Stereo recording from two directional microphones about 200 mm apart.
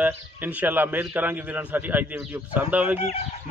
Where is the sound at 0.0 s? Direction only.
10° right (ahead or behind).